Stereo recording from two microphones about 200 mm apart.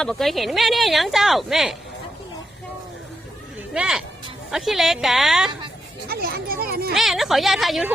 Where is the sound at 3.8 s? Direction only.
5° right (ahead or behind).